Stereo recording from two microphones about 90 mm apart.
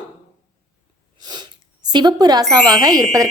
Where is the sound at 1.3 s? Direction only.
55° right (ahead or behind).